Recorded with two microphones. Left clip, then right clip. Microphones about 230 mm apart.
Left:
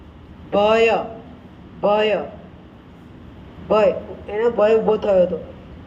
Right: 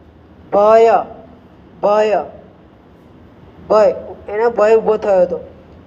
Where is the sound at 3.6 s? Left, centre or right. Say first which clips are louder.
Right 5 dB; centre.